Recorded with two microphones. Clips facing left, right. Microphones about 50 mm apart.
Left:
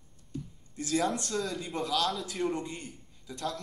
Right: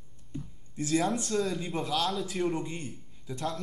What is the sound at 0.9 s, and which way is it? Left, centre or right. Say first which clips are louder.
A man's voice: right 2 dB; centre.